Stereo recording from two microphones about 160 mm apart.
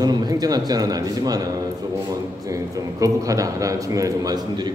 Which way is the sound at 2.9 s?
20° right (ahead or behind).